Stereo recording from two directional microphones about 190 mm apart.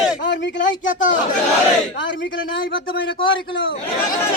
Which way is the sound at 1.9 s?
75° left (ahead or behind).